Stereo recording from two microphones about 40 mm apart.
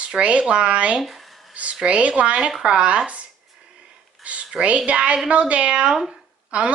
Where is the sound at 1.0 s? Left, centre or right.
Centre.